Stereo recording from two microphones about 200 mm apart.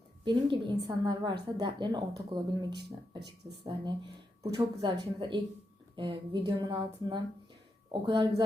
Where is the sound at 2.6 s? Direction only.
55° right (ahead or behind).